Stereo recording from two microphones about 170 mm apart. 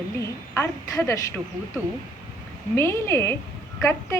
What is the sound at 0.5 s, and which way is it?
Speech, 15° left (ahead or behind).